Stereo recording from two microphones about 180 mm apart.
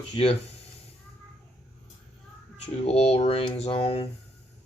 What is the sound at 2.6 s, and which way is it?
Speech, 35° left (ahead or behind).